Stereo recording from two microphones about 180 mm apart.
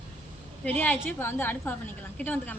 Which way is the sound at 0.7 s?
10° left (ahead or behind).